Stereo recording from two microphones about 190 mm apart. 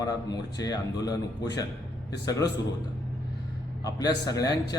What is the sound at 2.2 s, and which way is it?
Speech, 20° left (ahead or behind).